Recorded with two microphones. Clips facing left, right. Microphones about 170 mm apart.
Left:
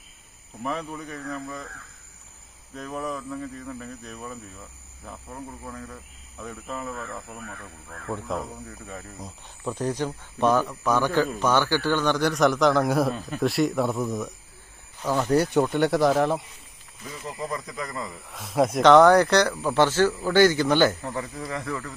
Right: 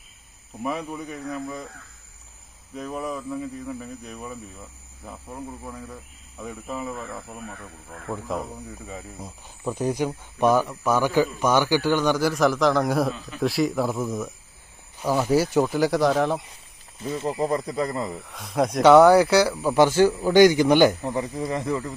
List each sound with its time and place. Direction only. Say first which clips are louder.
0.6 s speech: right 2 dB; 10° right (ahead or behind)
2.7 s speech: right 1 dB; 5° right (ahead or behind)
17.0 s speech: right 9 dB; 30° right (ahead or behind)
18.2 s speech: left 4 dB; centre (ahead or behind)
18.8 s speech: right 2 dB; 10° right (ahead or behind)